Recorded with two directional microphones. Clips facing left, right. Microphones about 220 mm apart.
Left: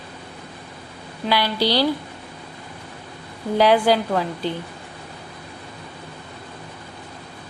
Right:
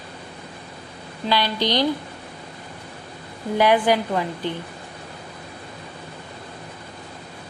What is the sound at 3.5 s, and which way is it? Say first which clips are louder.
Speech: left 2 dB; 15° right (ahead or behind).